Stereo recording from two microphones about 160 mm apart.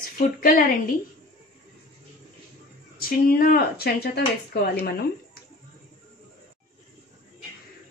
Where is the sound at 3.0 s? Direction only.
65° left (ahead or behind).